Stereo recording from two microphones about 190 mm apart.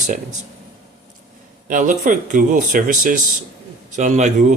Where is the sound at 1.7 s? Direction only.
45° right (ahead or behind).